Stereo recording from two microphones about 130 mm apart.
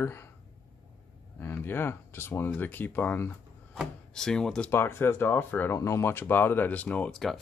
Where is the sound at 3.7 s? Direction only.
Centre (ahead or behind).